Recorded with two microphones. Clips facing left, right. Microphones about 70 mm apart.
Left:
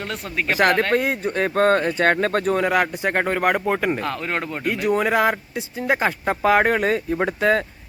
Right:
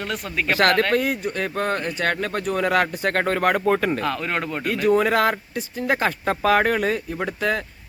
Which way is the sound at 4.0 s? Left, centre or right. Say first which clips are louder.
Right 1 dB; left.